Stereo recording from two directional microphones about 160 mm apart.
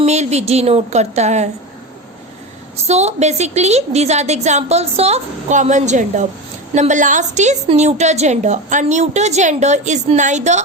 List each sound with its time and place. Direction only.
0.0 s a woman's voice: 45° right (ahead or behind)
2.8 s a woman's voice: 45° right (ahead or behind)